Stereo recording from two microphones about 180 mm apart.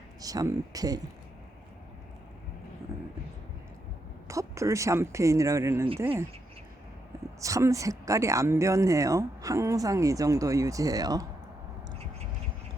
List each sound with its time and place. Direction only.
0.2 s speech: 20° right (ahead or behind)
4.3 s speech: 15° right (ahead or behind)
7.4 s speech: 20° right (ahead or behind)